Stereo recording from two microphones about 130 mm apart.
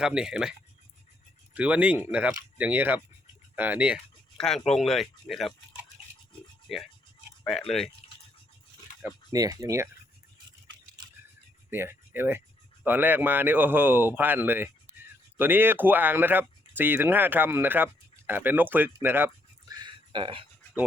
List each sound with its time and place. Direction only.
0.0 s speech: 5° right (ahead or behind)
1.5 s speech: 10° right (ahead or behind)
4.4 s speech: 5° left (ahead or behind)
6.7 s speech: centre (ahead or behind)
8.0 s a sound: 55° left (ahead or behind)
9.3 s speech: 25° right (ahead or behind)
11.7 s speech: 15° right (ahead or behind)
19.6 s a sound: 30° right (ahead or behind)